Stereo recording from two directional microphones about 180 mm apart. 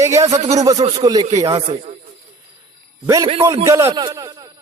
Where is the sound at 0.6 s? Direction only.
20° right (ahead or behind).